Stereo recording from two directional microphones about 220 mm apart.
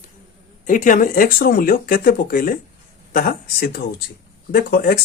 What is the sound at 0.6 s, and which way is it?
Speech, 35° left (ahead or behind).